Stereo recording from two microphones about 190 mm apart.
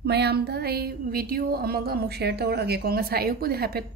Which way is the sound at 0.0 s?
60° right (ahead or behind).